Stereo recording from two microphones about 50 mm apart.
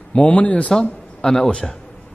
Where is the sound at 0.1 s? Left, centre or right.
Left.